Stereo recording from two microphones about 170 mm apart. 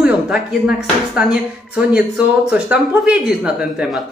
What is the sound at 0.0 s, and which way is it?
Speech, 5° right (ahead or behind).